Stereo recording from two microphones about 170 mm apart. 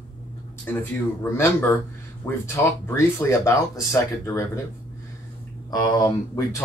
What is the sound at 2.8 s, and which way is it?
Speech, 15° left (ahead or behind).